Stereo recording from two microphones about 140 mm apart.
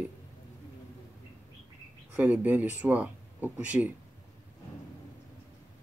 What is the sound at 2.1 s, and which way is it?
Speech, 10° right (ahead or behind).